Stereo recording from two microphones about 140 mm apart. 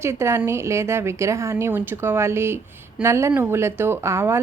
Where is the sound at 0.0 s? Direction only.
20° right (ahead or behind).